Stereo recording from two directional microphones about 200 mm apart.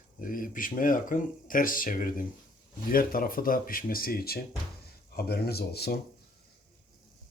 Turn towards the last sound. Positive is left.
turn(degrees=50)  # may be behind; listen again after turning